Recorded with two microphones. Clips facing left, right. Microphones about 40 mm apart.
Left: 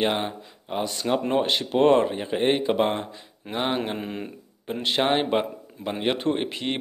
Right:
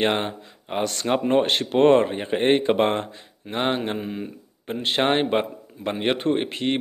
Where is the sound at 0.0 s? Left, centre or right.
Right.